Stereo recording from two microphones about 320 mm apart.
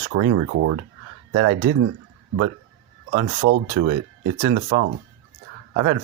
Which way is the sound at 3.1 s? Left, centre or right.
Right.